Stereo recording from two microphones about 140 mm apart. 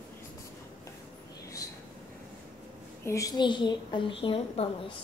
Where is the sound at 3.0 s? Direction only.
20° left (ahead or behind); by 4.7 s 40° left (ahead or behind).